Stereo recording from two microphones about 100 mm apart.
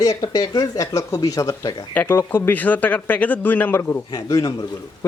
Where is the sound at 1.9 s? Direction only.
20° left (ahead or behind).